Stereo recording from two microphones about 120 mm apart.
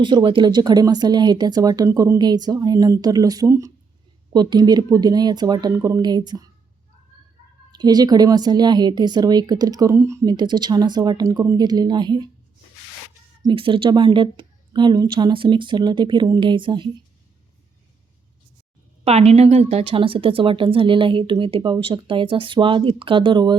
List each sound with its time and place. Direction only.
0.0 s speech: 45° right (ahead or behind)
7.7 s speech: 35° right (ahead or behind)
10.3 s speech: 40° right (ahead or behind)
13.4 s speech: 45° right (ahead or behind)
19.0 s a woman's voice: 60° right (ahead or behind); by 23.6 s 40° right (ahead or behind)